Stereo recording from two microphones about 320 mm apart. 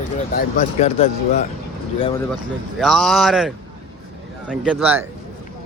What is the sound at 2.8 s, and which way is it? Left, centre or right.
A man's voice, centre.